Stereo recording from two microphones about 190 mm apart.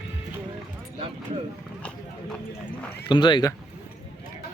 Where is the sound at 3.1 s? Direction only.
25° left (ahead or behind).